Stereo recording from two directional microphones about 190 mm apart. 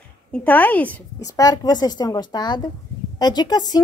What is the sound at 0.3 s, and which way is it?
Speech, 10° left (ahead or behind).